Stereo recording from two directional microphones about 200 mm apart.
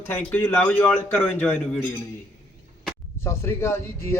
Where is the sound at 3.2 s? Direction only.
15° left (ahead or behind).